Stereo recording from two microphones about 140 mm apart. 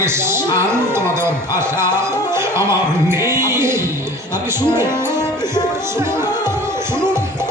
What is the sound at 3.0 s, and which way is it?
Music, 20° right (ahead or behind).